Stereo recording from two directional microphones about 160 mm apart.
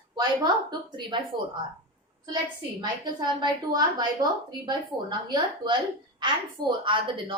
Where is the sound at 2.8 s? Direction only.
25° right (ahead or behind).